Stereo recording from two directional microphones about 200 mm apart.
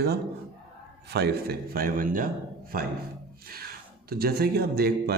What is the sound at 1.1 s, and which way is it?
A man's voice, 50° right (ahead or behind).